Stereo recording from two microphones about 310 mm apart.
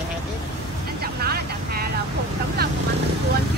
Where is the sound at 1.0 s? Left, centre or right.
Right.